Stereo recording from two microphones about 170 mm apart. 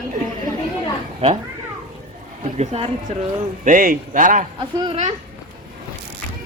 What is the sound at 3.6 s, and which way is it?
Speech, 50° right (ahead or behind).